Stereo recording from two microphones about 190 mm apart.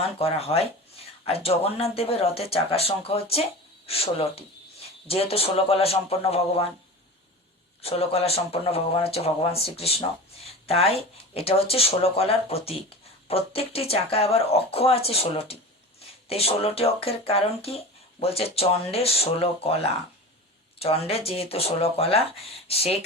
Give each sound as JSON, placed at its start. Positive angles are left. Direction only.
{"t": 0.2, "sound": "speech", "side_deg": 30}
{"t": 7.8, "sound": "speech", "side_deg": 30}
{"t": 20.7, "sound": "speech", "side_deg": 30}